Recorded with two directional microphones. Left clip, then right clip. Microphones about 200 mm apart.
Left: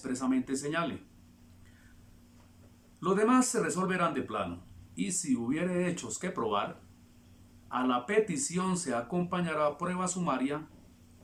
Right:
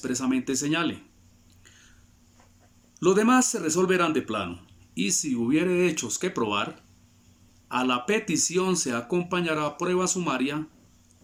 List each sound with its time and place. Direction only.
0.0 s speech: 15° right (ahead or behind)
3.0 s speech: 15° right (ahead or behind)
7.7 s speech: 15° right (ahead or behind)